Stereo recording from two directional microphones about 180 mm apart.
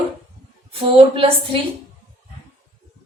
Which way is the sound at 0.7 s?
30° right (ahead or behind).